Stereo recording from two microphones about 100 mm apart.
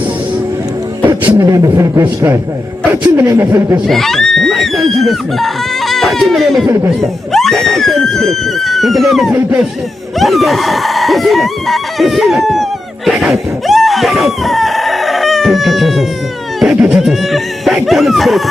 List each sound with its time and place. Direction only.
1.4 s a man's voice: 35° right (ahead or behind)
3.8 s speech: 5° left (ahead or behind)
7.0 s chicken: 5° left (ahead or behind)
13.1 s speech: centre (ahead or behind)
16.6 s chicken: 5° right (ahead or behind)